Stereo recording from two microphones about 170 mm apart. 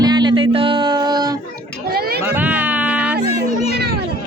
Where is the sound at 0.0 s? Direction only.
25° right (ahead or behind).